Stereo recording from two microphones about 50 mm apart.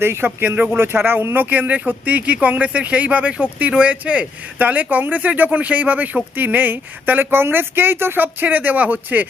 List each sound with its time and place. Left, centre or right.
0.0 s speech: right